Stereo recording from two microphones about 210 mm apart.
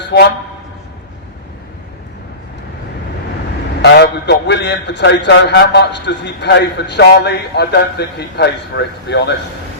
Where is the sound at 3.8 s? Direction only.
55° left (ahead or behind).